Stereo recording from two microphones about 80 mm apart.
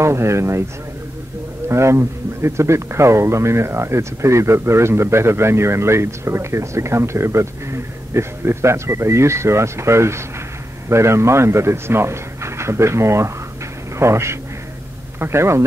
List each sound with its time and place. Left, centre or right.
0.0 s a man's voice: right
1.7 s a man's voice: right